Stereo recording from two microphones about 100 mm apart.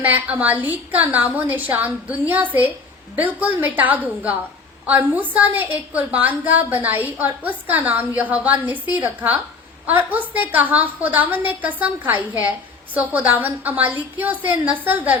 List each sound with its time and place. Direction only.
0.0 s a woman's voice: 15° right (ahead or behind)